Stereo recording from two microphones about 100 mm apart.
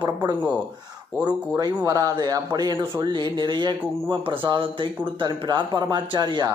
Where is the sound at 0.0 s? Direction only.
45° right (ahead or behind).